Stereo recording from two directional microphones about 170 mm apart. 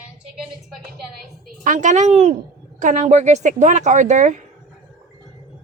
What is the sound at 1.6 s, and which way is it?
Speech, 50° right (ahead or behind).